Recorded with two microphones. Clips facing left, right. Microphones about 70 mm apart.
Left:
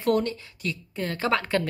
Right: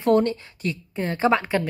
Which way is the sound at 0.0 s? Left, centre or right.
Right.